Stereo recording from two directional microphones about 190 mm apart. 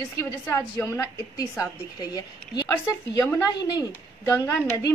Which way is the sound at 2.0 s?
20° left (ahead or behind).